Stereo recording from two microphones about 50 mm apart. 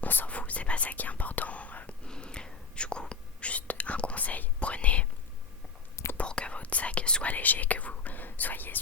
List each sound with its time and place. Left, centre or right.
0.0 s whispering: left
0.3 s whispering: left
2.0 s whispering: centre
6.1 s whispering: left
7.3 s speech: left